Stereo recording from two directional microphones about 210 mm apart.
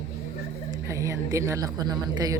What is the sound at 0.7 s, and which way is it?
Speech, 15° right (ahead or behind).